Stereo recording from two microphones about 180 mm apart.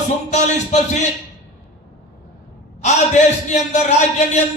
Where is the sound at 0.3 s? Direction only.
40° left (ahead or behind).